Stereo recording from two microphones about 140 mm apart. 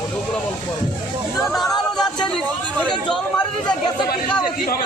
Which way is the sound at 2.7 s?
5° left (ahead or behind).